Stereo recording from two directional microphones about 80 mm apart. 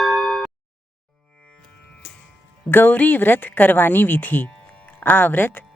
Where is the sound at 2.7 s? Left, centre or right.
Left.